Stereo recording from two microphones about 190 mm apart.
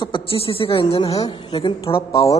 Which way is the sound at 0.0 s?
25° left (ahead or behind).